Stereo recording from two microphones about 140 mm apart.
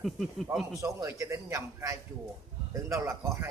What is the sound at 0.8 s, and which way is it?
A man's voice, 25° right (ahead or behind).